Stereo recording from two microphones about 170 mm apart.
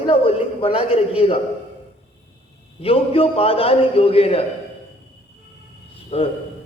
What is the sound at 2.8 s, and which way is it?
A man's voice, 35° left (ahead or behind).